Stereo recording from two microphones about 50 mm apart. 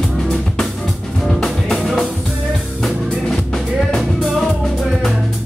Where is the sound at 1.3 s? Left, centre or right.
Centre.